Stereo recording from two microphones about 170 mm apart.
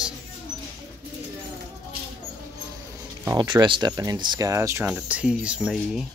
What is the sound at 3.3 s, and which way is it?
Speech, 25° right (ahead or behind).